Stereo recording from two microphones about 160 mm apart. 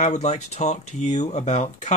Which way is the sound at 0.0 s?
45° left (ahead or behind).